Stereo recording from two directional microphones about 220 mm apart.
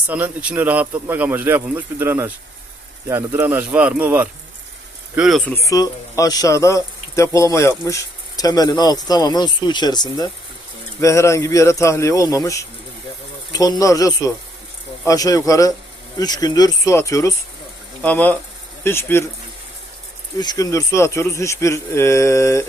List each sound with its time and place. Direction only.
0.1 s speech: 10° right (ahead or behind)
5.6 s speech: 15° left (ahead or behind)
20.4 s speech: 15° left (ahead or behind)